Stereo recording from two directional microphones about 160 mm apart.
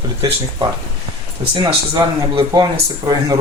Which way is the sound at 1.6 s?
30° right (ahead or behind).